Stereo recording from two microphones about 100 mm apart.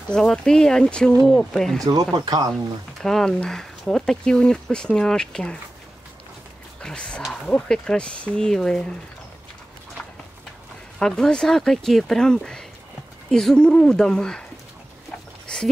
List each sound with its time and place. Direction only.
0.1 s speech: 5° left (ahead or behind)
1.8 s speech: 40° right (ahead or behind)
2.5 s speech: 5° left (ahead or behind)
6.8 s speech: 10° left (ahead or behind)
7.2 s speech: 5° right (ahead or behind)
7.4 s speech: 5° left (ahead or behind)
11.0 s speech: 5° left (ahead or behind)
15.4 s a sound: 5° left (ahead or behind)